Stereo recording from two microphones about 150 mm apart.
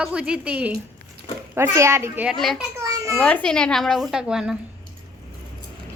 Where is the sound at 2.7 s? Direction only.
20° right (ahead or behind).